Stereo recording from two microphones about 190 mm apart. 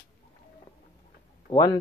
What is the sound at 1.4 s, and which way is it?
Speech, 20° left (ahead or behind).